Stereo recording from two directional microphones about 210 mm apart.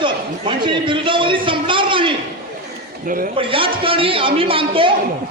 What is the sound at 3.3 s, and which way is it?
Speech, 25° right (ahead or behind).